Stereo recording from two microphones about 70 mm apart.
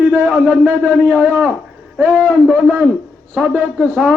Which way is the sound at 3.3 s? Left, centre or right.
Centre.